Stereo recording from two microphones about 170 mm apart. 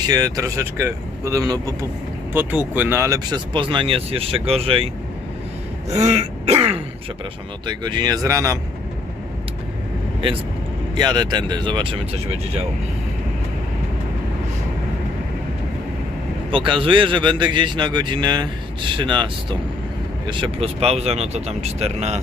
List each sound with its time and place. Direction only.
0.0 s speech: 25° right (ahead or behind)
2.3 s speech: 10° right (ahead or behind); by 4.9 s 35° right (ahead or behind)
5.9 s speech: 40° right (ahead or behind)
7.7 s speech: 25° right (ahead or behind)
10.9 s speech: 25° right (ahead or behind)
16.5 s speech: 30° right (ahead or behind)